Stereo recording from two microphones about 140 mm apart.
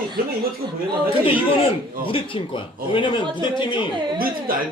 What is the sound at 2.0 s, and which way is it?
Speech, 40° left (ahead or behind).